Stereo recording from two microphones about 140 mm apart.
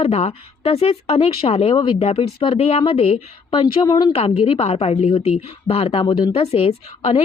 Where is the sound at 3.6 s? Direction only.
30° left (ahead or behind).